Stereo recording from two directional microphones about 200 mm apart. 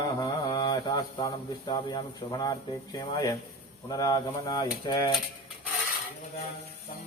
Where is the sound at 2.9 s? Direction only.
15° left (ahead or behind).